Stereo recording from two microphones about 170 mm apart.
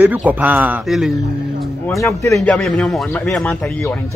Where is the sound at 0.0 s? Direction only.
10° right (ahead or behind).